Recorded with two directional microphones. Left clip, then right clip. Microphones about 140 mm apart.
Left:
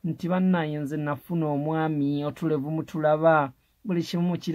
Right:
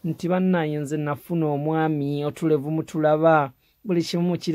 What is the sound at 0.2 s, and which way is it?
Speech, 35° right (ahead or behind).